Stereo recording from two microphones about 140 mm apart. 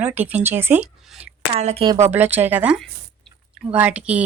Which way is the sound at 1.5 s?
50° right (ahead or behind).